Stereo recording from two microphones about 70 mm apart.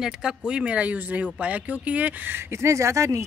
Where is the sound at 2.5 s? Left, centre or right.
Right.